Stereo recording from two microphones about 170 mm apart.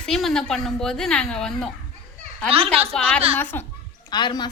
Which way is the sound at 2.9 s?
5° left (ahead or behind).